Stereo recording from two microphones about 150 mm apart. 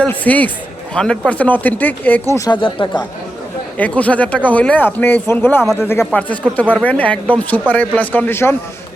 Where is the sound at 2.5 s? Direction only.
30° left (ahead or behind).